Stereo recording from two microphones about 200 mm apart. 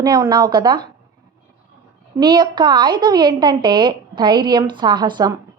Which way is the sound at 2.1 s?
20° right (ahead or behind).